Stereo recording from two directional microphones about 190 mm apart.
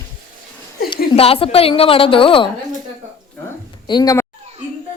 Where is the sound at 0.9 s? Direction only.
30° left (ahead or behind).